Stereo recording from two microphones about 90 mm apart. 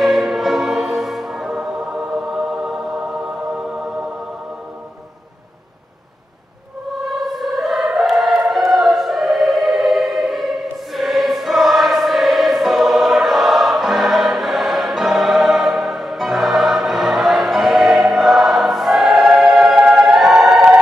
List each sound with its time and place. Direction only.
0.0 s music: centre (ahead or behind)
7.1 s choir: centre (ahead or behind)